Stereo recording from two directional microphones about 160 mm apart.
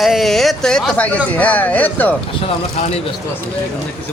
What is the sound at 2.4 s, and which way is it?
Speech, 40° left (ahead or behind).